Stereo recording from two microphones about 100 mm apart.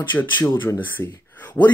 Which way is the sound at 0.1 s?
20° left (ahead or behind).